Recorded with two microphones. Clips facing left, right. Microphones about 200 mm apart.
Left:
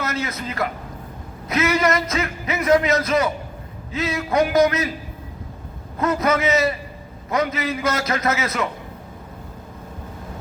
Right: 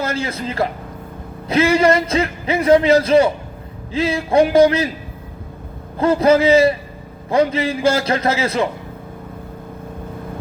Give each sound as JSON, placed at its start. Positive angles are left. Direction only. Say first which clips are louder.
{"t": 0.0, "sound": "a man's voice", "louder": "right 4 dB", "side_deg": -30}
{"t": 6.0, "sound": "a man's voice", "louder": "right 7 dB", "side_deg": -30}